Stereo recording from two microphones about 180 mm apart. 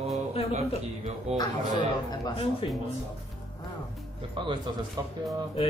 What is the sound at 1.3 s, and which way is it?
Mantra, 35° right (ahead or behind).